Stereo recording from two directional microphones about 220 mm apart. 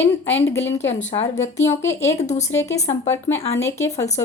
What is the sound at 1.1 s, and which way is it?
A woman's voice, 20° left (ahead or behind).